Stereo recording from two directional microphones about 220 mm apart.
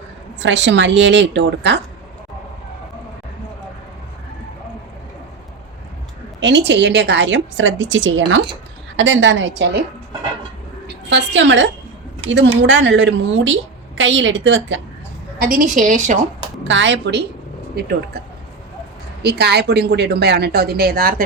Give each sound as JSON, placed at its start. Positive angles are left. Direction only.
{"t": 0.3, "sound": "a woman's voice", "side_deg": -55}
{"t": 6.4, "sound": "a woman's voice", "side_deg": -50}
{"t": 10.8, "sound": "a woman's voice", "side_deg": -55}
{"t": 15.4, "sound": "a woman's voice", "side_deg": -40}
{"t": 16.6, "sound": "a woman's voice", "side_deg": -55}
{"t": 19.2, "sound": "a woman's voice", "side_deg": -50}